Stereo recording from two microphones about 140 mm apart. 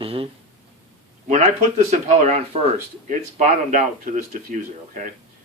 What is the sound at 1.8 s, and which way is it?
Speech, 55° right (ahead or behind).